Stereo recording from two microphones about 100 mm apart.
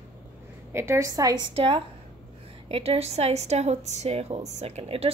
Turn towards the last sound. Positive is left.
turn(degrees=-75)  # may be behind; listen again after turning